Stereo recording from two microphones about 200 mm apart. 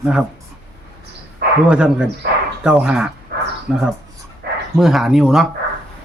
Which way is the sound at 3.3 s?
55° right (ahead or behind).